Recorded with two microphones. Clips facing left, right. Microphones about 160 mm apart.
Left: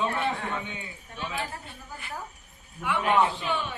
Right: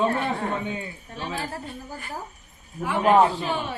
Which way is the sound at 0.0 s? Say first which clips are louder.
Right 4 dB; 40° right (ahead or behind).